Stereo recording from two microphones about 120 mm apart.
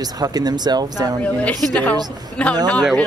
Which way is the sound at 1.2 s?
10° left (ahead or behind).